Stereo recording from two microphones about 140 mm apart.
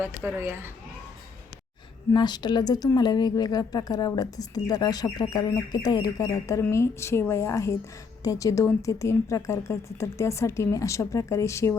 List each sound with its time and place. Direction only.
0.0 s speech: 15° right (ahead or behind)
2.1 s a woman's voice: 30° left (ahead or behind)